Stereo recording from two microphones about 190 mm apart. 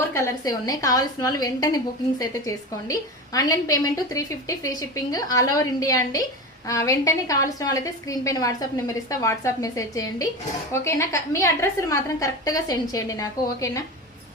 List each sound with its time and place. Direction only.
0.1 s a woman's voice: 15° left (ahead or behind)